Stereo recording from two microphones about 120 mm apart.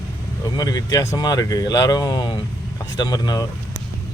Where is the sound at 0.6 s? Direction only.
35° left (ahead or behind).